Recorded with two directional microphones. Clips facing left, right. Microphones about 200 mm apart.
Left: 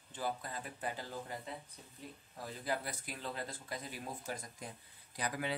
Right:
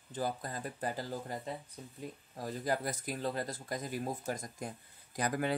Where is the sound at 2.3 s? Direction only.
45° right (ahead or behind).